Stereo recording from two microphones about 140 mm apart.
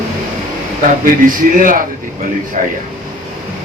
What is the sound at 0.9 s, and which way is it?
Speech, 75° right (ahead or behind).